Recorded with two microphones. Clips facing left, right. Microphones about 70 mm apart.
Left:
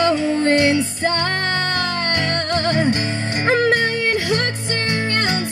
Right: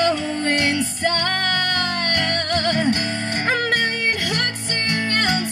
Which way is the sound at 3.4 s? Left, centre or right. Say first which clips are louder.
Left 5 dB; left.